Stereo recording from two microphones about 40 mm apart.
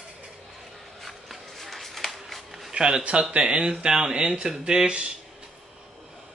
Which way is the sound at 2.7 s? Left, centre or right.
Right.